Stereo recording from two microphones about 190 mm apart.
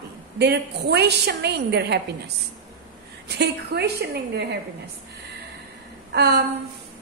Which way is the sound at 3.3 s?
60° right (ahead or behind).